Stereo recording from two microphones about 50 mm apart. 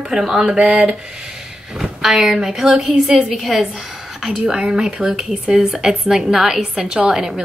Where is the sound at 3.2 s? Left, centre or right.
Centre.